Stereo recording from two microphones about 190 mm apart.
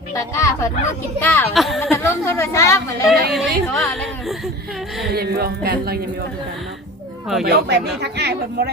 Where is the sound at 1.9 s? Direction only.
15° left (ahead or behind).